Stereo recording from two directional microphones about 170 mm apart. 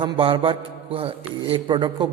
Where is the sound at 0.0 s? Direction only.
30° right (ahead or behind).